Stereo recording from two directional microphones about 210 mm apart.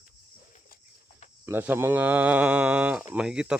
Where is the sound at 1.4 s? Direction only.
10° right (ahead or behind).